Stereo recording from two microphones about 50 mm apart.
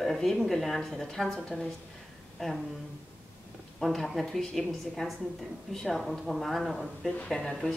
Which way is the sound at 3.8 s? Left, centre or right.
Centre.